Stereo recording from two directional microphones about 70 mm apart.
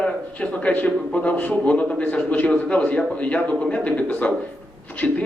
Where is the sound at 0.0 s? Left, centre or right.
Centre.